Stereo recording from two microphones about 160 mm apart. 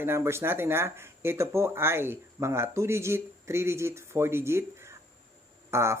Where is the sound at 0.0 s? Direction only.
15° right (ahead or behind).